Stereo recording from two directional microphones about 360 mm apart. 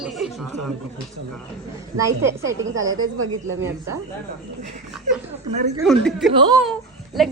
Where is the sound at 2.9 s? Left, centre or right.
Right.